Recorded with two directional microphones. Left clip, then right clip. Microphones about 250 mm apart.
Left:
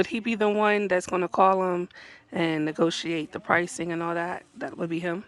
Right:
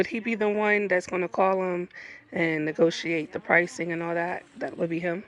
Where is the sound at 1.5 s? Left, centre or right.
Left.